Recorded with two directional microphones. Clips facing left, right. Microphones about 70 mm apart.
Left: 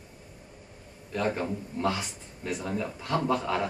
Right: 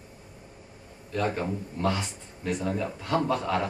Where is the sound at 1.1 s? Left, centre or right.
Centre.